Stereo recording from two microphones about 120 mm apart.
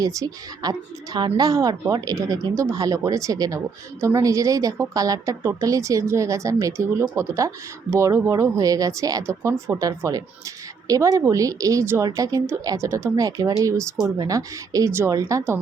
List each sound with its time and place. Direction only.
0.0 s a woman's voice: 30° right (ahead or behind)